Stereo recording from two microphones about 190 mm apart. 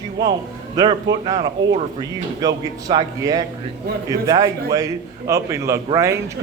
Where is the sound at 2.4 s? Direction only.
20° right (ahead or behind).